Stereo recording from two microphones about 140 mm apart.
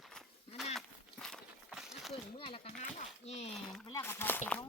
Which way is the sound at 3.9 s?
25° left (ahead or behind).